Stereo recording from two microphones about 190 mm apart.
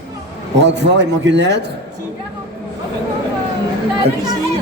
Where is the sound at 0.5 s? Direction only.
65° right (ahead or behind).